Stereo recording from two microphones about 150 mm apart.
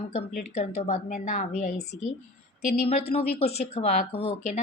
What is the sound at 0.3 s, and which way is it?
Speech, 50° left (ahead or behind).